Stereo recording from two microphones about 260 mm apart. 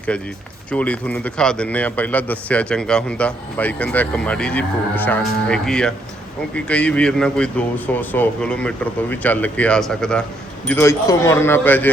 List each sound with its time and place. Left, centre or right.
0.1 s a man's voice: centre